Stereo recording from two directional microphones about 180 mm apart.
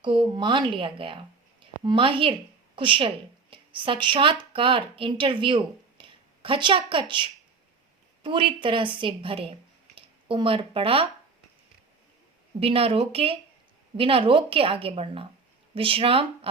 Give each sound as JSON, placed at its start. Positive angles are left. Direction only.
{"t": 0.0, "sound": "a woman's voice", "side_deg": -30}
{"t": 12.5, "sound": "a woman's voice", "side_deg": -30}